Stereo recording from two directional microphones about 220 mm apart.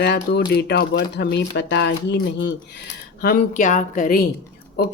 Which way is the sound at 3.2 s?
40° left (ahead or behind).